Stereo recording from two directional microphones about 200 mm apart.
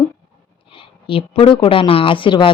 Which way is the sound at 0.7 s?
25° left (ahead or behind).